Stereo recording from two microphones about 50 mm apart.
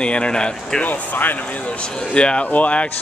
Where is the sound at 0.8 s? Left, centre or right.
Left.